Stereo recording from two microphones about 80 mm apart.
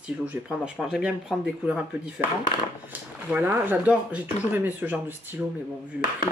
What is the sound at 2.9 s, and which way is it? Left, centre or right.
Speech, right.